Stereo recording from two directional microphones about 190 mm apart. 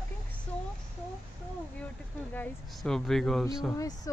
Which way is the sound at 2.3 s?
5° left (ahead or behind).